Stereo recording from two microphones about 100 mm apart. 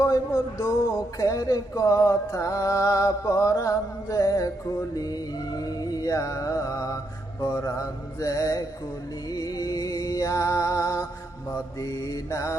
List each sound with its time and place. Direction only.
0.0 s music: 30° left (ahead or behind)